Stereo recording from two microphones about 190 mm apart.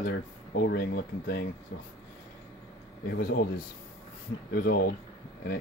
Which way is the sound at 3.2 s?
50° left (ahead or behind).